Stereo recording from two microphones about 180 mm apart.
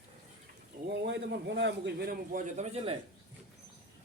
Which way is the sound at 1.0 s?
70° right (ahead or behind).